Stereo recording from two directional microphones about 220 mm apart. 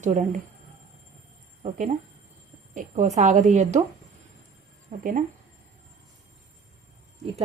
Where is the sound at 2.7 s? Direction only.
35° right (ahead or behind).